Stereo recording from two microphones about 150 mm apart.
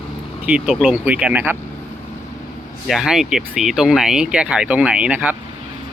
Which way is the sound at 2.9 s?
Centre (ahead or behind).